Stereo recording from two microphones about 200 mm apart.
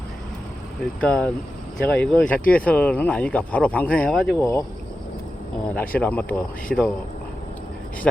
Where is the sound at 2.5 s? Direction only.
5° left (ahead or behind).